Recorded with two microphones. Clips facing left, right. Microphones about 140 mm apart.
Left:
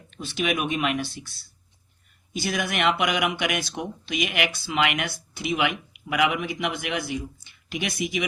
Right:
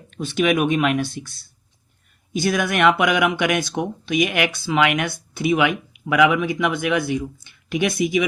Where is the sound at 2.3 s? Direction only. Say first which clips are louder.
Right 7 dB; 50° right (ahead or behind).